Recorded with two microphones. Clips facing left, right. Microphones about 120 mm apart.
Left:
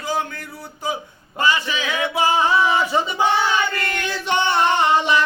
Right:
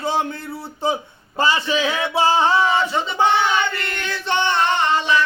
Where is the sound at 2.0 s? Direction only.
30° right (ahead or behind).